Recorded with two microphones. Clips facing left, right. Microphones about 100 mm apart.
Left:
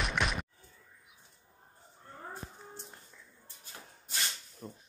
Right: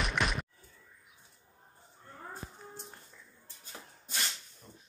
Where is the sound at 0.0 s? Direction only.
Centre (ahead or behind).